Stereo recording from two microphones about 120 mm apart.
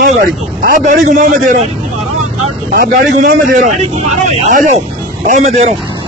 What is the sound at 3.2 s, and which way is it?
Speech, 90° right.